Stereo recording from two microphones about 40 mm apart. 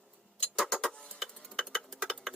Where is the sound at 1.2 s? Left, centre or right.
Centre.